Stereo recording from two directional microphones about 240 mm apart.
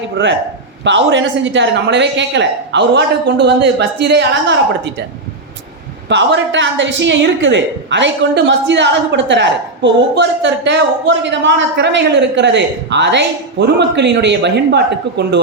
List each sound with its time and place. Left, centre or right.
0.2 s a woman's voice: right
6.1 s a woman's voice: right